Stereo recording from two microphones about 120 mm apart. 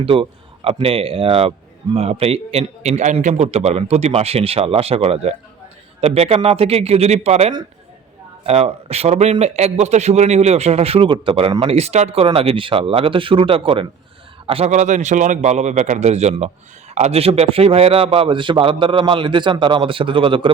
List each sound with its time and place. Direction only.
0.0 s speech: 50° right (ahead or behind)
11.6 s a man's voice: 60° right (ahead or behind)
14.7 s a man's voice: 90° right; by 20.5 s 45° right (ahead or behind)